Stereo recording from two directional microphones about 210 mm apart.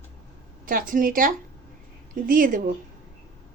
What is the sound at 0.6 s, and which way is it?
A woman's voice, 40° right (ahead or behind).